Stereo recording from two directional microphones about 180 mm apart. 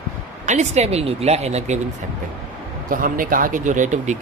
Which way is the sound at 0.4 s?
40° right (ahead or behind).